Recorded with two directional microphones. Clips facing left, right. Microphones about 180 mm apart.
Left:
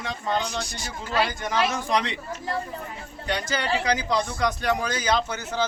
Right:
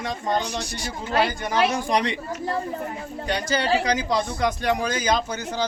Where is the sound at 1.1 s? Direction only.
55° right (ahead or behind).